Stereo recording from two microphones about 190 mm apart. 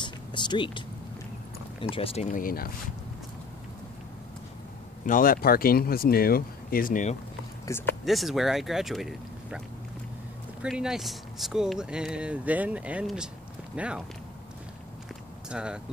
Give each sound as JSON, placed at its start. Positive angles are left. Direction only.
{"t": 0.0, "sound": "a sound", "side_deg": 25}
{"t": 1.8, "sound": "speech", "side_deg": 30}
{"t": 2.3, "sound": "speech", "side_deg": 50}
{"t": 5.0, "sound": "speech", "side_deg": 45}
{"t": 7.7, "sound": "speech", "side_deg": 15}
{"t": 8.0, "sound": "speech", "side_deg": 0}
{"t": 10.6, "sound": "speech", "side_deg": -5}
{"t": 15.5, "sound": "speech", "side_deg": -5}